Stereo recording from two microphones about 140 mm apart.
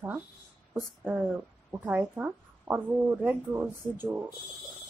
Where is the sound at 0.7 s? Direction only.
10° right (ahead or behind).